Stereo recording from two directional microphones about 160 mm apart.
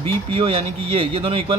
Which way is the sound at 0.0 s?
35° right (ahead or behind).